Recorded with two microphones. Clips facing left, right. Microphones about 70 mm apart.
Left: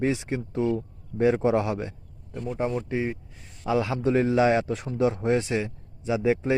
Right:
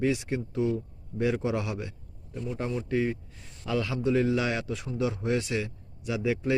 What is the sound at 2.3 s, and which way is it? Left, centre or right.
Speech, left.